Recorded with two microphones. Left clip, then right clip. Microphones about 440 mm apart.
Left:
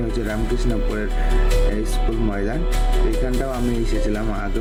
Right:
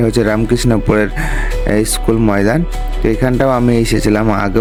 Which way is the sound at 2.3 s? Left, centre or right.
Right.